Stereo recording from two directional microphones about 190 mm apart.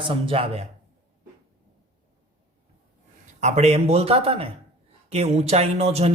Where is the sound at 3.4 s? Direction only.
35° right (ahead or behind).